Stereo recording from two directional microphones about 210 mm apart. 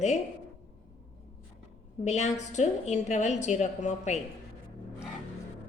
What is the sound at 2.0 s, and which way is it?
A woman's voice, 35° left (ahead or behind).